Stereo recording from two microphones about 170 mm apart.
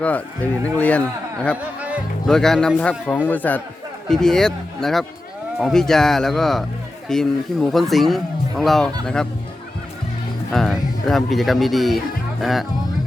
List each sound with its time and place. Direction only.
0.6 s a man's voice: 10° left (ahead or behind)
1.8 s speech: 10° right (ahead or behind)
2.3 s a man's voice: 5° left (ahead or behind)
10.5 s speech: centre (ahead or behind)